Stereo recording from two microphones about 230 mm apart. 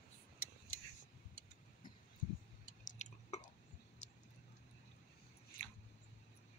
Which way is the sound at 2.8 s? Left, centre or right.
Left.